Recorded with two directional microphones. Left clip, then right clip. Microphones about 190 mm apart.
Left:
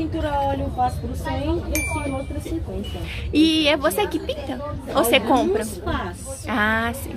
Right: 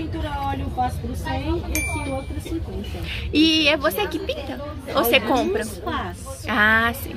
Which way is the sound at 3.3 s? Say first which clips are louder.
Even; 10° left (ahead or behind).